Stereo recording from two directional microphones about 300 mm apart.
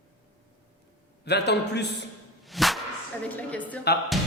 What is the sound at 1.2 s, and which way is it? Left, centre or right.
Speech, left.